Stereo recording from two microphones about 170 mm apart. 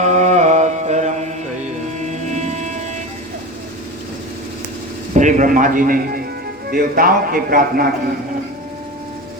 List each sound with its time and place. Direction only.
0.0 s mantra: 45° right (ahead or behind)
5.1 s a man's voice: 50° right (ahead or behind)